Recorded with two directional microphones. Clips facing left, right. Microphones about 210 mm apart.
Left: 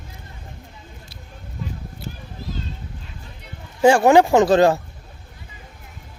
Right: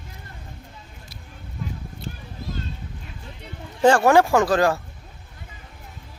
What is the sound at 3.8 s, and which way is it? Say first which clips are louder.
Speech: left 3 dB; 15° left (ahead or behind).